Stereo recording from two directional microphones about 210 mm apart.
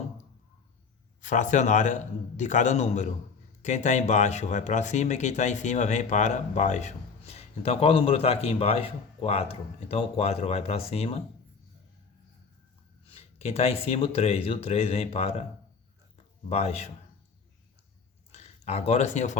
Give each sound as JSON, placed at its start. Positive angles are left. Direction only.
{"t": 1.2, "sound": "speech", "side_deg": 35}
{"t": 13.1, "sound": "speech", "side_deg": 30}
{"t": 16.5, "sound": "speech", "side_deg": 30}
{"t": 18.3, "sound": "speech", "side_deg": 30}